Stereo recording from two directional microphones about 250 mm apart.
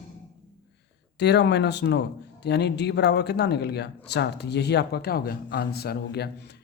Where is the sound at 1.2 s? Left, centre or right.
Left.